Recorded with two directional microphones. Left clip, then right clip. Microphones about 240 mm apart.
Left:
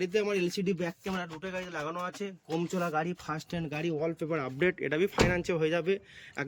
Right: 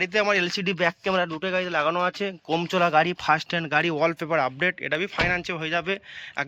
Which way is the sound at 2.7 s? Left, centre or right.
Right.